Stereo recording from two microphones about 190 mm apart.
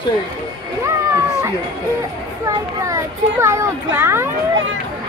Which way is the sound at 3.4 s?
15° right (ahead or behind).